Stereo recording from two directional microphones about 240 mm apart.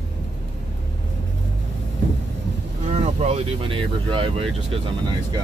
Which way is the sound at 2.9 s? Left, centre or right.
Right.